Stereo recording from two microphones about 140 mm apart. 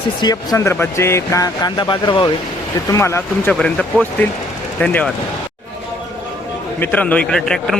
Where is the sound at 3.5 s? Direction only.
5° left (ahead or behind).